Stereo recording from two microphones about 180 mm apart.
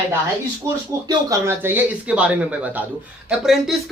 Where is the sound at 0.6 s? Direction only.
20° right (ahead or behind).